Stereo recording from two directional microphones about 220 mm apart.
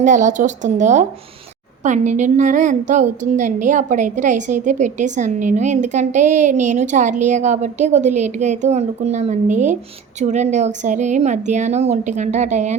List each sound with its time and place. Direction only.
0.0 s a woman's voice: 35° right (ahead or behind)